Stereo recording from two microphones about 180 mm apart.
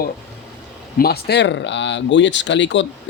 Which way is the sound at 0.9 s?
60° left (ahead or behind).